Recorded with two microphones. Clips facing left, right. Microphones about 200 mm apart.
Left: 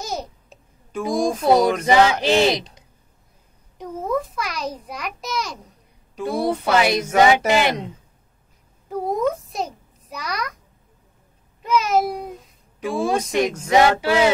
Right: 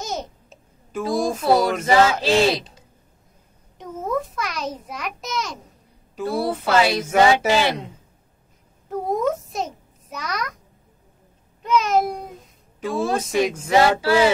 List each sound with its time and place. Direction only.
0.0 s babbling: centre (ahead or behind)
1.1 s a child's voice: 5° right (ahead or behind)
1.9 s male singing: 15° left (ahead or behind)
4.0 s a child's voice: centre (ahead or behind)
6.7 s male singing: 15° left (ahead or behind)
8.8 s a child's voice: centre (ahead or behind)
11.6 s a child's voice: centre (ahead or behind)
12.8 s male singing: 15° left (ahead or behind)
13.2 s a child's voice: 5° right (ahead or behind)
13.7 s a sound: 20° left (ahead or behind)